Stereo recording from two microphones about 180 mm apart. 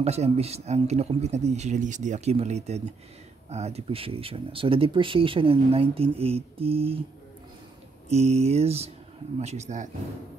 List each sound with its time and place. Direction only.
0.0 s speech: 35° right (ahead or behind)
8.1 s speech: 35° right (ahead or behind)